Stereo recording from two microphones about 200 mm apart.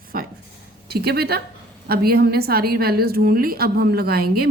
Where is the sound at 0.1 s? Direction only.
45° right (ahead or behind).